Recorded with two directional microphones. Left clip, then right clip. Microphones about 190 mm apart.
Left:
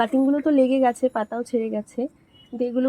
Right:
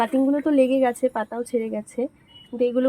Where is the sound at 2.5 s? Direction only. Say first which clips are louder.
Right 3 dB; 20° left (ahead or behind).